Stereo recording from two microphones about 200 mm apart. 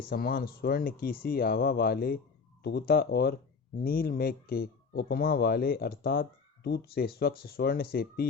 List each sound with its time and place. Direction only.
0.0 s speech: 50° left (ahead or behind)